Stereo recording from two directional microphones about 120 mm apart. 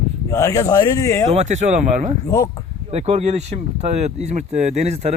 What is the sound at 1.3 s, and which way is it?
Speech, 70° right (ahead or behind).